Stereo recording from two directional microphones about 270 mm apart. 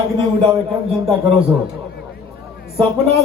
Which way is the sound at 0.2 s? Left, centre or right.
Centre.